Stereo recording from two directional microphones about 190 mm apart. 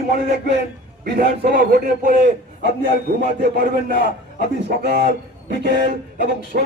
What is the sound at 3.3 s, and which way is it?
A man's voice, 55° right (ahead or behind).